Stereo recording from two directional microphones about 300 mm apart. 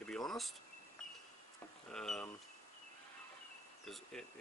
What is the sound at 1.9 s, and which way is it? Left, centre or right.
Speech, centre.